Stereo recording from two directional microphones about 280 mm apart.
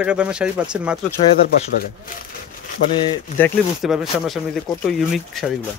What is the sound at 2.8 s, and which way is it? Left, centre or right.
Speech, centre.